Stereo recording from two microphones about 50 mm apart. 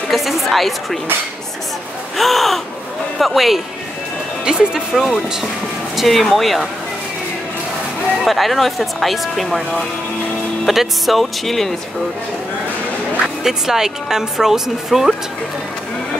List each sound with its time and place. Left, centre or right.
0.1 s speech: centre
2.1 s speech: centre
4.5 s speech: centre
4.9 s speech: centre
8.2 s speech: centre
10.7 s speech: centre
13.4 s speech: centre